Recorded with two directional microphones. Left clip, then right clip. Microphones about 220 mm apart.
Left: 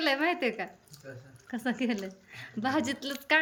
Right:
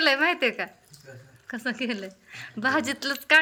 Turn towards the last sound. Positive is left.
turn(degrees=5)  # may be behind; listen again after turning